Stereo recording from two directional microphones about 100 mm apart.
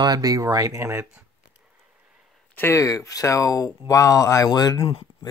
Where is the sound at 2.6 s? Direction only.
30° left (ahead or behind).